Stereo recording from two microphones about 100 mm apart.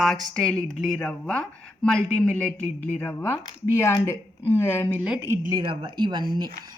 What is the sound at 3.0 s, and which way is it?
Speech, 20° left (ahead or behind).